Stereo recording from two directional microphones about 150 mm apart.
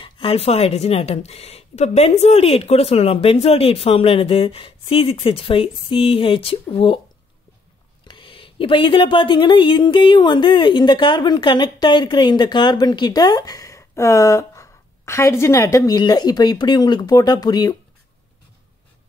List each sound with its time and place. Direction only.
0.0 s speech: 40° left (ahead or behind)
8.0 s speech: 35° left (ahead or behind)